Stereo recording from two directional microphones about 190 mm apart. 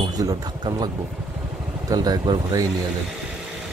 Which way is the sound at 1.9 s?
20° right (ahead or behind).